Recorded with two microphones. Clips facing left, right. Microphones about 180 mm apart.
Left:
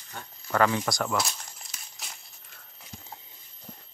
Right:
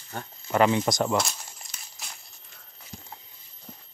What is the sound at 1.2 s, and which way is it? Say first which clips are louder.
Crumpling: right 3 dB; centre (ahead or behind).